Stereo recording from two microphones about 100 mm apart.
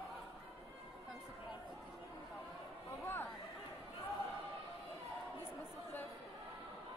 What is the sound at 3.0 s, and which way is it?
Chatter, 25° left (ahead or behind).